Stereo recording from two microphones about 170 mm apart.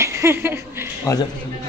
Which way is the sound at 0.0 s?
15° right (ahead or behind).